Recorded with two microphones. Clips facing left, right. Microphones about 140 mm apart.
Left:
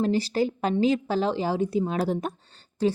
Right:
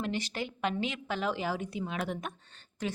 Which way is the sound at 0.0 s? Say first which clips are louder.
Left 11 dB; 35° left (ahead or behind).